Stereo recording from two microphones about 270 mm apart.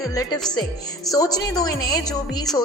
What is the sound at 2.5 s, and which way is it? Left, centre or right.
Speech, centre.